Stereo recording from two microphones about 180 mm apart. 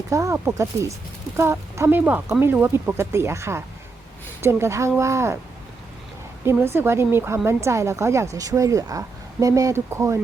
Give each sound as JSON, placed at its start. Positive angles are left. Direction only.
{"t": 0.1, "sound": "speech", "side_deg": -15}
{"t": 6.4, "sound": "a woman's voice", "side_deg": -15}